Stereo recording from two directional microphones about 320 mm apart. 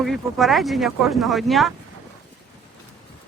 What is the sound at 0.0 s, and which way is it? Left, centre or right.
Speech, centre.